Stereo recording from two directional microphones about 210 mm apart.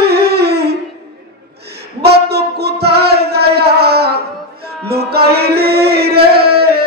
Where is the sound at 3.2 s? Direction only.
50° right (ahead or behind).